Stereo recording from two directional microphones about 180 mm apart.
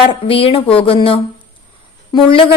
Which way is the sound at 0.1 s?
30° left (ahead or behind).